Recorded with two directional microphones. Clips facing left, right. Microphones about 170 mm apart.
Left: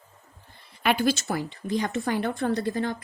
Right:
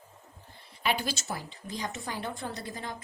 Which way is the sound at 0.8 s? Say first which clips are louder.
Left 8 dB; 60° left (ahead or behind).